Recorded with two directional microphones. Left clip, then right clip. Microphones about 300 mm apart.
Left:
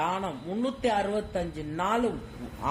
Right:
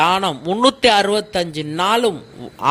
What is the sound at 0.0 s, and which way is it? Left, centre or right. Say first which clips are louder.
A man's voice: right 14 dB; right.